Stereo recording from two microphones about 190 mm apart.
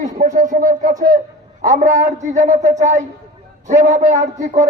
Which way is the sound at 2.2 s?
40° right (ahead or behind).